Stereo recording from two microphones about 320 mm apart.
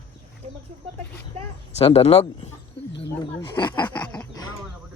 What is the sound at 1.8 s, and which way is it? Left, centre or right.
Speech, centre.